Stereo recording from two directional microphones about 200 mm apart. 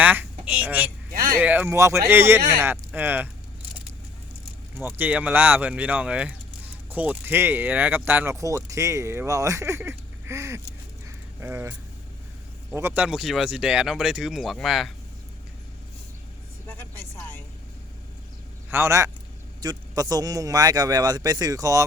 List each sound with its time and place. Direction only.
0.0 s a woman's voice: 10° right (ahead or behind)
1.1 s a sound: 45° right (ahead or behind)
1.4 s speech: 10° right (ahead or behind)
4.8 s speech: 10° right (ahead or behind)
12.7 s speech: 10° right (ahead or behind)
18.7 s a man's voice: 15° right (ahead or behind)